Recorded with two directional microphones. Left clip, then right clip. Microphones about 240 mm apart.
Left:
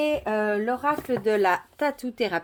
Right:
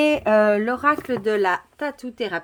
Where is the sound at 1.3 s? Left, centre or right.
Centre.